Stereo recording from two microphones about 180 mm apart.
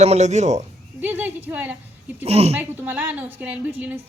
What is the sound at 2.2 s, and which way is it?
Speech, 35° right (ahead or behind).